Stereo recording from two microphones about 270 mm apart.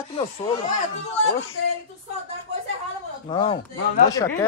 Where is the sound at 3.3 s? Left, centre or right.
Centre.